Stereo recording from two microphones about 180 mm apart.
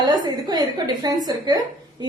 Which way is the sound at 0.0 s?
25° right (ahead or behind).